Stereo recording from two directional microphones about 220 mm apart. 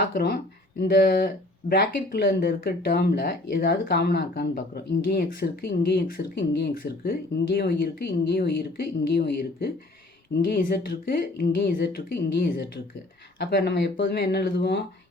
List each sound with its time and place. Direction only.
0.0 s speech: 45° left (ahead or behind)